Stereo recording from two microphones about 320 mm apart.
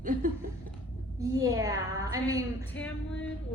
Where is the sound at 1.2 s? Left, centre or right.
Centre.